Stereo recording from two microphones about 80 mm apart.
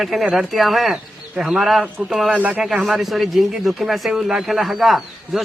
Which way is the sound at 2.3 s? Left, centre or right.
Centre.